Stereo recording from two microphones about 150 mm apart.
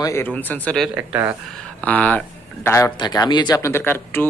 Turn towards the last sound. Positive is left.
turn(degrees=15)  # may be behind; listen again after turning